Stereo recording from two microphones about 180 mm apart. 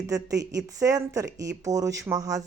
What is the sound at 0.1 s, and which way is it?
Speech, 20° right (ahead or behind).